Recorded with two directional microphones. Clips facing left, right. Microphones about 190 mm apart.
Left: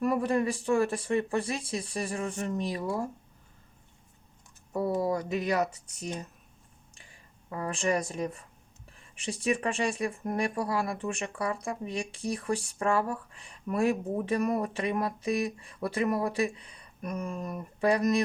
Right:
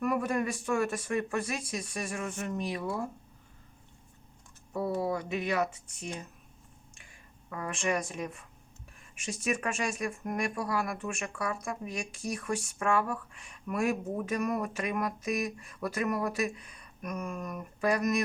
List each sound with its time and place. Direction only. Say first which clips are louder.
0.0 s speech: left 3 dB; 30° left (ahead or behind)
4.7 s speech: left 3 dB; 40° left (ahead or behind)
7.5 s speech: left 3 dB; 35° left (ahead or behind)